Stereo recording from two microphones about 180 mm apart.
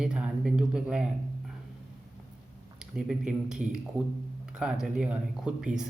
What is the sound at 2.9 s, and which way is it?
Speech, 5° right (ahead or behind).